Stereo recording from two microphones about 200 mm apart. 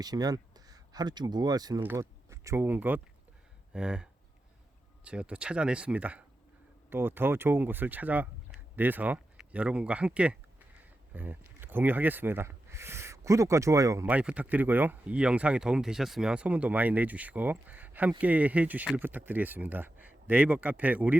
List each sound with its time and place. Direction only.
0.0 s speech: 20° right (ahead or behind)
3.7 s a sound: 5° right (ahead or behind)
5.0 s speech: 5° right (ahead or behind)